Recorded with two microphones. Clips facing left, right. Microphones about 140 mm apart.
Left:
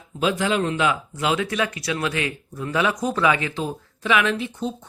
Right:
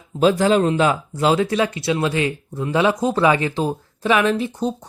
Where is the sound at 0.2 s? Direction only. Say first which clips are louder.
Right 6 dB; 40° right (ahead or behind).